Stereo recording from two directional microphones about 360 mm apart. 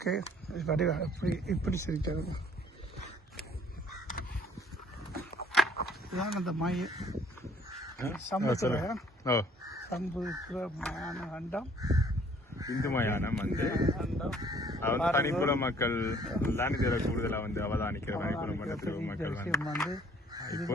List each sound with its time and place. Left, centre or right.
0.1 s speech: centre
5.7 s a sound: left
6.3 s speech: centre
8.0 s speech: centre
11.8 s speech: centre
12.5 s crow: centre
12.8 s speech: centre
13.7 s speech: centre
14.2 s speech: centre
14.4 s a sound: centre
14.8 s speech: centre
19.9 s goose: centre